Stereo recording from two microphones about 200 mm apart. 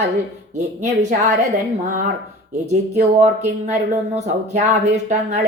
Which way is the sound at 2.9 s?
35° right (ahead or behind).